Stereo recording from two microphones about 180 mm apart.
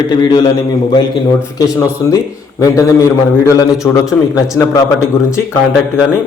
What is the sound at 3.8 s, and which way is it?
Speech, 20° left (ahead or behind).